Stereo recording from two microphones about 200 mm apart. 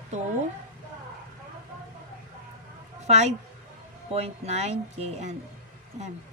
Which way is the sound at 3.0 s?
35° right (ahead or behind).